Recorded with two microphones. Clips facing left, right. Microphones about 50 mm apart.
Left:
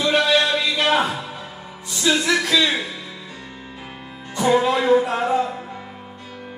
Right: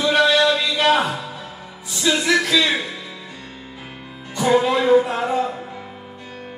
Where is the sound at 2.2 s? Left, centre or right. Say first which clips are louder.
Right 1 dB; centre.